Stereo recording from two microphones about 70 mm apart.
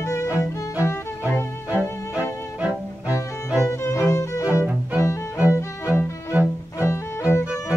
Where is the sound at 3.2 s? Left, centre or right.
Left.